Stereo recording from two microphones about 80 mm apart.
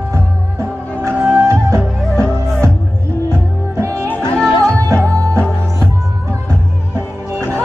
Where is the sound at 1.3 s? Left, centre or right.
Right.